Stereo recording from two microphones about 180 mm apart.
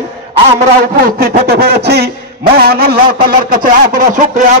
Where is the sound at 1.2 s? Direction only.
55° right (ahead or behind).